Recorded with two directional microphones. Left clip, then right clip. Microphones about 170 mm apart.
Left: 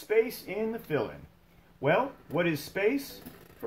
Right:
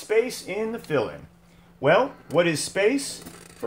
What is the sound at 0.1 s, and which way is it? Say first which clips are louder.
Speech: right 4 dB; 25° right (ahead or behind).